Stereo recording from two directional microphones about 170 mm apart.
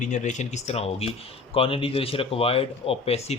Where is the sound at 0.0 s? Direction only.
45° left (ahead or behind).